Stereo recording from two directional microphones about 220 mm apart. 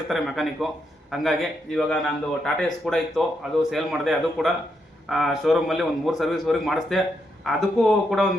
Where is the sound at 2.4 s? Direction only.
5° left (ahead or behind).